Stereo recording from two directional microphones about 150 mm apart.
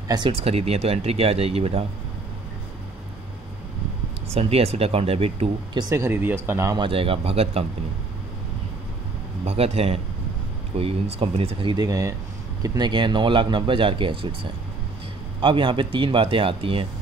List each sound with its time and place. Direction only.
0.1 s speech: 35° right (ahead or behind)
4.3 s speech: 40° right (ahead or behind)
5.8 s speech: 20° right (ahead or behind)
6.8 s speech: 40° right (ahead or behind)
9.4 s speech: 40° right (ahead or behind)
15.4 s speech: 35° right (ahead or behind)